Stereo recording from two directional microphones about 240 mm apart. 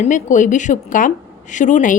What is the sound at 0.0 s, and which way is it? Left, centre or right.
A woman's voice, left.